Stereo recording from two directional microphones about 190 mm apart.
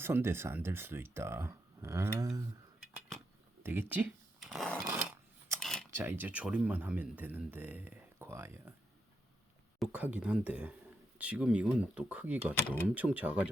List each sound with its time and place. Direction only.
0.0 s speech: 10° right (ahead or behind)
3.6 s speech: 10° right (ahead or behind)
4.9 s a sound: 5° right (ahead or behind)
5.9 s speech: 10° right (ahead or behind)
9.7 s speech: 5° right (ahead or behind)
12.5 s speech: 10° left (ahead or behind)
12.9 s speech: 5° right (ahead or behind)